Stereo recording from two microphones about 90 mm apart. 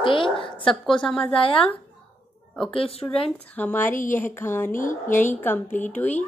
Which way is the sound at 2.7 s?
90° left.